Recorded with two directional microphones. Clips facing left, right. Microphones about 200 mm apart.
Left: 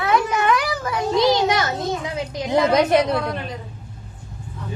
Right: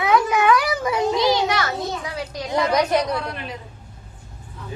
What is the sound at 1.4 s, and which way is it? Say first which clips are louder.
A child's voice: left 2 dB; 20° left (ahead or behind).